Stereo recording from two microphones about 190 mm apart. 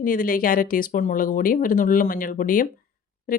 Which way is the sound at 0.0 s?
45° left (ahead or behind).